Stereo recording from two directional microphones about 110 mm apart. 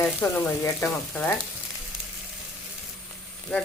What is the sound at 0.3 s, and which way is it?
Speech, 20° left (ahead or behind).